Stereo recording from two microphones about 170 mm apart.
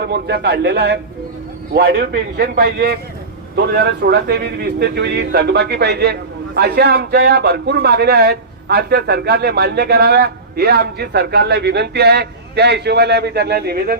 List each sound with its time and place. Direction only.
0.0 s speech: 80° right